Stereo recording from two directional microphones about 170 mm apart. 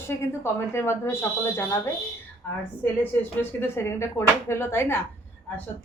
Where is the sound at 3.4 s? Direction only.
10° left (ahead or behind).